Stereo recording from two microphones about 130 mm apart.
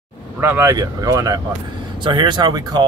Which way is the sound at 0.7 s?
30° right (ahead or behind).